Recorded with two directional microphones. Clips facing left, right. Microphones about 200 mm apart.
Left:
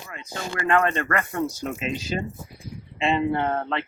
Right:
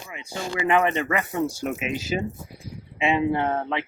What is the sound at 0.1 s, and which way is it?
Speech, 15° right (ahead or behind).